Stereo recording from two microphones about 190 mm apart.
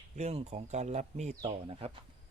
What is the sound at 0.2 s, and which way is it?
Speech, 35° right (ahead or behind).